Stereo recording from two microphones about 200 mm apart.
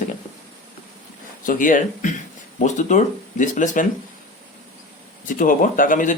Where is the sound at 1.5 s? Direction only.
40° left (ahead or behind).